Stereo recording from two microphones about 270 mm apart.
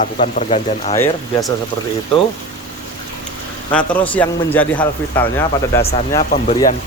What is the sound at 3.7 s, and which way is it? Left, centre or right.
Speech, centre.